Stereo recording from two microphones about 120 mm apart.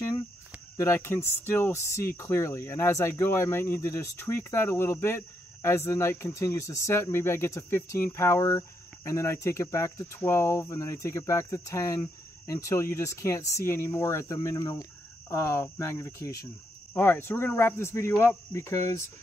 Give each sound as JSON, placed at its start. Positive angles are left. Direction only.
{"t": 0.7, "sound": "speech", "side_deg": 20}
{"t": 18.1, "sound": "speech", "side_deg": 10}
{"t": 18.5, "sound": "speech", "side_deg": 25}